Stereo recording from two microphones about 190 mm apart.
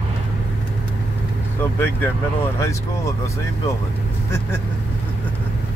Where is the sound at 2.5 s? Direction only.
15° left (ahead or behind).